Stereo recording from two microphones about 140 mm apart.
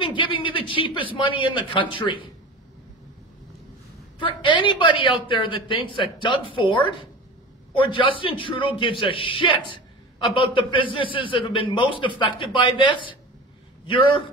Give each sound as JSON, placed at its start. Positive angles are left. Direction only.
{"t": 0.0, "sound": "a sound", "side_deg": 35}
{"t": 1.1, "sound": "a man's voice", "side_deg": 40}
{"t": 4.2, "sound": "a man's voice", "side_deg": 35}